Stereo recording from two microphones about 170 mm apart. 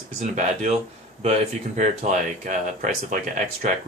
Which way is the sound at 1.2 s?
45° right (ahead or behind).